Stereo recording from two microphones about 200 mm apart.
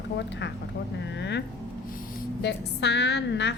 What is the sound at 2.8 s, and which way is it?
Speech, 60° left (ahead or behind).